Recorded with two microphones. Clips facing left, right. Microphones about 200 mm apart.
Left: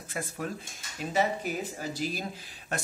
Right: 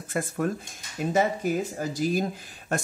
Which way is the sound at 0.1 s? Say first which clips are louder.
Right 8 dB; 50° right (ahead or behind).